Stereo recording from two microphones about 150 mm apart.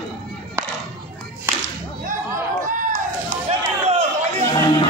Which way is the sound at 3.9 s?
40° right (ahead or behind).